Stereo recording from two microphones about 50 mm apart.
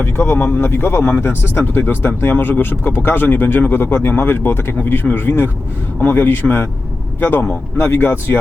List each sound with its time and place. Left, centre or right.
0.0 s speech: left
4.8 s a man's voice: left
7.8 s speech: left